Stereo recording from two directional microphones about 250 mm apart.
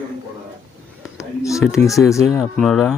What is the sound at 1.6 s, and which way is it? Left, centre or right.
Speech, centre.